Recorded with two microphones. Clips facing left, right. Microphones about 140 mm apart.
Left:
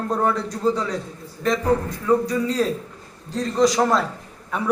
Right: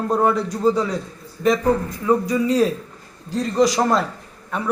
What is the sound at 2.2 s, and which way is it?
A man's voice, 10° right (ahead or behind).